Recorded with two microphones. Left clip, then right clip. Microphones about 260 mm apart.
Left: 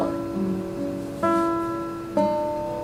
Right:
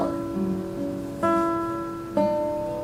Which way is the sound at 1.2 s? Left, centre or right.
Centre.